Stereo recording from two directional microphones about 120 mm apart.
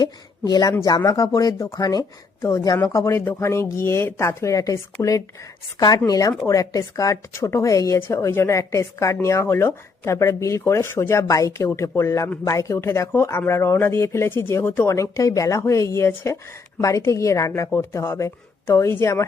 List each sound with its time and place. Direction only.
0.0 s a woman's voice: 35° left (ahead or behind)
2.4 s speech: 20° left (ahead or behind)